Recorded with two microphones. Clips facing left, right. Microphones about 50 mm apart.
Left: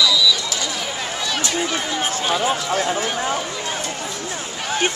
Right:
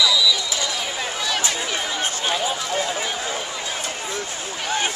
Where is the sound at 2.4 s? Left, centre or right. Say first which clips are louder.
Left 4 dB; left.